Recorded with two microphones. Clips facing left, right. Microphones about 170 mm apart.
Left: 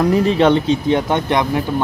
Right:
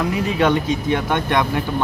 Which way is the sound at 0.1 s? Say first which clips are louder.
Left 5 dB; 30° left (ahead or behind).